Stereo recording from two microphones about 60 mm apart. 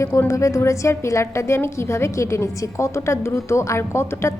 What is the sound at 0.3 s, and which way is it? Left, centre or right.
A woman's voice, left.